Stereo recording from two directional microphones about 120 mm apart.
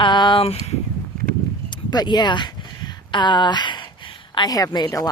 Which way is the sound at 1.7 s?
40° left (ahead or behind).